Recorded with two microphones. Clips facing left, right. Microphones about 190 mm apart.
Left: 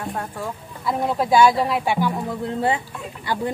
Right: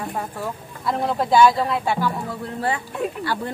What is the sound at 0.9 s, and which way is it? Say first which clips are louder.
Speech: even; 10° left (ahead or behind).